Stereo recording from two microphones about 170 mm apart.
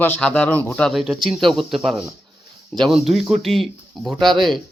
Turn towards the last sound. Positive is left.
turn(degrees=0)  # may be behind; listen again after turning